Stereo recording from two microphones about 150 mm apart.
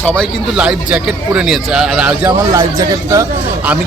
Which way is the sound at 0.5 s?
5° right (ahead or behind).